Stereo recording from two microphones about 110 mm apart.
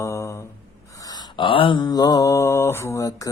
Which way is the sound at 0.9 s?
35° left (ahead or behind).